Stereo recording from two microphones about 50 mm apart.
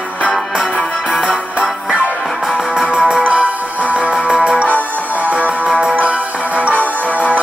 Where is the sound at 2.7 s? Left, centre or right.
Centre.